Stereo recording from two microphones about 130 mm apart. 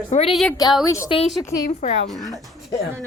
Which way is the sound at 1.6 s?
65° left (ahead or behind).